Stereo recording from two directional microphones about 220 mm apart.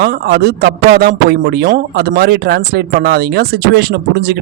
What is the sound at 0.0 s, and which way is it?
Speech, 45° right (ahead or behind).